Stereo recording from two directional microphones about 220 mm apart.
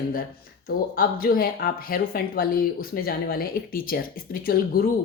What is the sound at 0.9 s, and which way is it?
Speech, 40° left (ahead or behind).